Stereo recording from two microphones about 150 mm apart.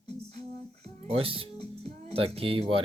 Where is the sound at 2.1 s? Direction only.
40° right (ahead or behind).